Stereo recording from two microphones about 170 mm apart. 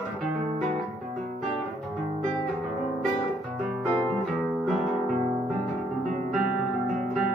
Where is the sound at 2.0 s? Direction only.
Centre (ahead or behind).